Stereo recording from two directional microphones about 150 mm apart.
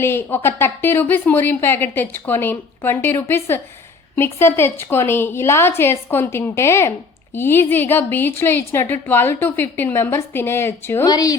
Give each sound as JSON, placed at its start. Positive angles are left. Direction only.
{"t": 0.0, "sound": "a woman's voice", "side_deg": 15}
{"t": 11.0, "sound": "a woman's voice", "side_deg": 25}